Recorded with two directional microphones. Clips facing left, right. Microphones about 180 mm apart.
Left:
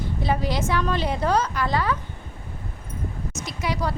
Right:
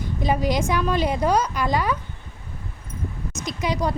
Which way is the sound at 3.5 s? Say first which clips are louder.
Right 3 dB; 20° right (ahead or behind).